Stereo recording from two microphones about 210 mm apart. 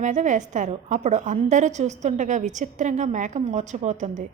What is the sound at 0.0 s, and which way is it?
A woman's voice, 35° right (ahead or behind).